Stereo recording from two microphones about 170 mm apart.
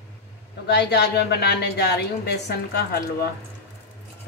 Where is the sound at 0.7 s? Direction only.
80° left.